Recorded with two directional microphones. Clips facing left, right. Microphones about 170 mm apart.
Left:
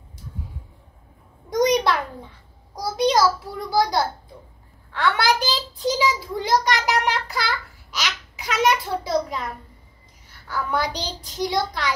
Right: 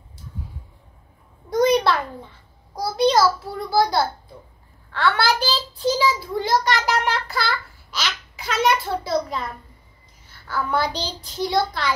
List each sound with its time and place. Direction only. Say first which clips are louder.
1.5 s a sound: right 1 dB; 15° left (ahead or behind)
2.7 s a child's voice: right 2 dB; 15° left (ahead or behind)
10.5 s a child's voice: right 2 dB; 15° left (ahead or behind)